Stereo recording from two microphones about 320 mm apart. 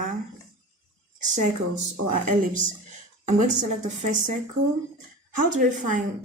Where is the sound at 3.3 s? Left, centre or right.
Right.